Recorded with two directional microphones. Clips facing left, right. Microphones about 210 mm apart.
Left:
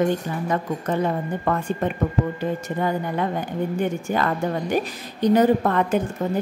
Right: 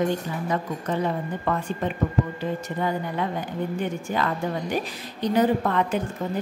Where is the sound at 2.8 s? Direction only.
50° left (ahead or behind).